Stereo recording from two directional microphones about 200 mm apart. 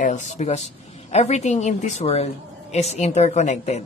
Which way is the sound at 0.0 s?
35° left (ahead or behind).